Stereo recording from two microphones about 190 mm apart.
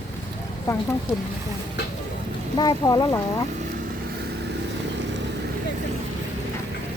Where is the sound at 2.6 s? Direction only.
20° left (ahead or behind).